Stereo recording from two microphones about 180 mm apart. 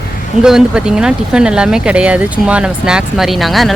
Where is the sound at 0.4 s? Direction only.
5° right (ahead or behind).